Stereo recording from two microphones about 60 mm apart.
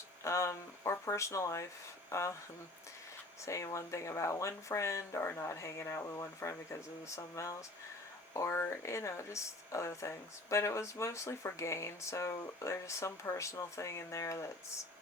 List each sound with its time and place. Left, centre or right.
0.3 s speech: left
3.4 s speech: left
8.4 s speech: left